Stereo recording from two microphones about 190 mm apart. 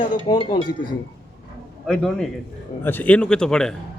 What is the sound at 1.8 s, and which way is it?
A man's voice, 5° left (ahead or behind).